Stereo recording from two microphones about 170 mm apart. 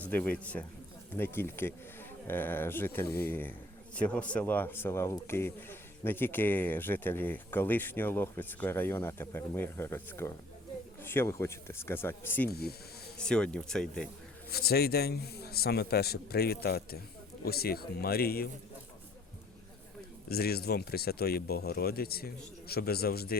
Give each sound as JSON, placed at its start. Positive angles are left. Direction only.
{"t": 0.0, "sound": "a man's voice", "side_deg": 10}
{"t": 12.5, "sound": "a man's voice", "side_deg": 65}
{"t": 13.1, "sound": "speech", "side_deg": 5}
{"t": 14.5, "sound": "a man's voice", "side_deg": 65}
{"t": 20.2, "sound": "speech", "side_deg": 65}